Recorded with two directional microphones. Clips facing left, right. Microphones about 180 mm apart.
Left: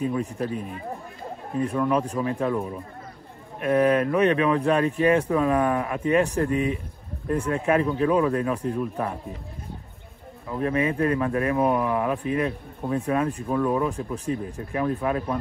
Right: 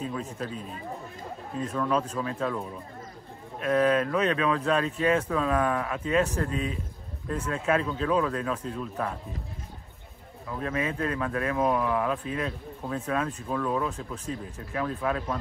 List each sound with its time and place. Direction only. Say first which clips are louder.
0.0 s speech: left 7 dB; 15° left (ahead or behind)
1.7 s speech: left 2 dB; 15° left (ahead or behind)
10.5 s speech: left 6 dB; 15° left (ahead or behind)